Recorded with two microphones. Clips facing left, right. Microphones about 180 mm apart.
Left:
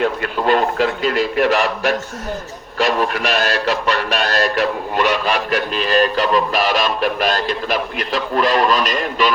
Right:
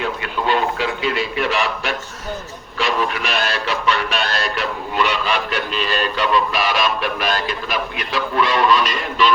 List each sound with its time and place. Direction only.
0.0 s a man's voice: 45° left (ahead or behind)